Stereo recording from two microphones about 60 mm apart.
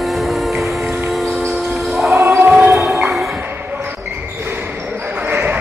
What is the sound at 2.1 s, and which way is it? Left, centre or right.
Choir, right.